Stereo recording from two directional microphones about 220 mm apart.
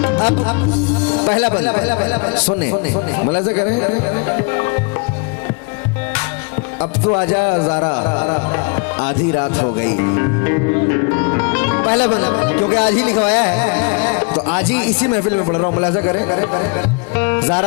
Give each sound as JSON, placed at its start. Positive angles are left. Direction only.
{"t": 0.2, "sound": "music", "side_deg": 30}
{"t": 1.5, "sound": "speech", "side_deg": 25}
{"t": 7.1, "sound": "speech", "side_deg": 25}
{"t": 11.3, "sound": "sitar", "side_deg": 20}
{"t": 12.1, "sound": "speech", "side_deg": 20}
{"t": 17.2, "sound": "music", "side_deg": 20}